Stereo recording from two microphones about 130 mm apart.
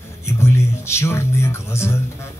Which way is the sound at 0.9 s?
20° left (ahead or behind).